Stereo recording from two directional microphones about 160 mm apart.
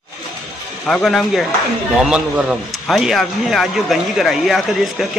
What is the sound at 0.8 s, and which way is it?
A man's voice, centre (ahead or behind).